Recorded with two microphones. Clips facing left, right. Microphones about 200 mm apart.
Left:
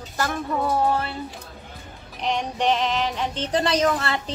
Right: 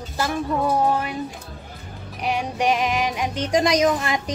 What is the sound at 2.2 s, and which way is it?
Music, 10° right (ahead or behind).